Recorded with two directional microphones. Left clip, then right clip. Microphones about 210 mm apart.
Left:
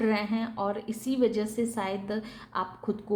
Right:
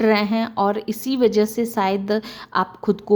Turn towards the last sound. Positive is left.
turn(degrees=-40)  # may be behind; listen again after turning